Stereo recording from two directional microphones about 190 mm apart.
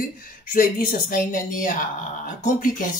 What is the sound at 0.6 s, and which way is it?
Speech, 45° left (ahead or behind).